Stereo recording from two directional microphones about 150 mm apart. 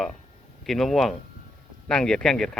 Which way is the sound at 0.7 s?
Centre (ahead or behind).